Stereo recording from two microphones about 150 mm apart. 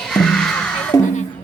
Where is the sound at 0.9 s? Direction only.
20° left (ahead or behind).